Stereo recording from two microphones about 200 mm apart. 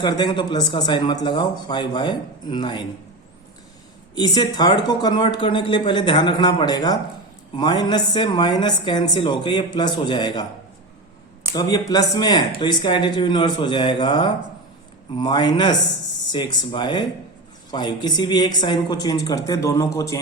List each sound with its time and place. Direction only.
0.0 s speech: 20° left (ahead or behind)
4.1 s speech: 20° left (ahead or behind)
11.5 s speech: 20° left (ahead or behind)